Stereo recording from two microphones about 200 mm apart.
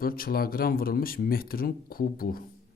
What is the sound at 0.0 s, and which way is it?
Speech, 45° left (ahead or behind).